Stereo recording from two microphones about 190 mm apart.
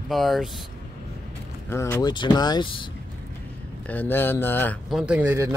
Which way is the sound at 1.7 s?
15° left (ahead or behind).